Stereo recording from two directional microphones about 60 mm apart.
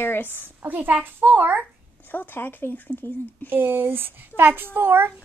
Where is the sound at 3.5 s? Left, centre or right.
Right.